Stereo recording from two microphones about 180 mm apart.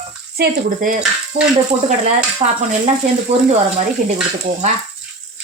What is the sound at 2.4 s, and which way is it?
Stir, 35° right (ahead or behind).